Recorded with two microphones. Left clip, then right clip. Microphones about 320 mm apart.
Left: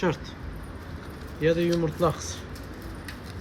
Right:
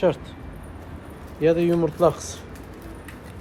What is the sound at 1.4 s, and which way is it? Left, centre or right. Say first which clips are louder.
Speech: right 4 dB; centre.